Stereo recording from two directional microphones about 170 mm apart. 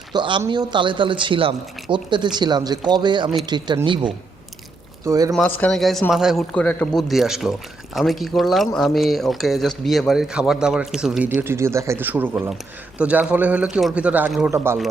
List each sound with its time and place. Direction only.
0.1 s a man's voice: 25° right (ahead or behind)
5.0 s a man's voice: 20° right (ahead or behind)
5.5 s a man's voice: 5° left (ahead or behind); by 14.8 s 15° right (ahead or behind)